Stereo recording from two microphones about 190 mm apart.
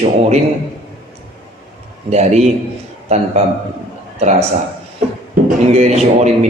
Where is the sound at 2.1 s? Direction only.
35° right (ahead or behind).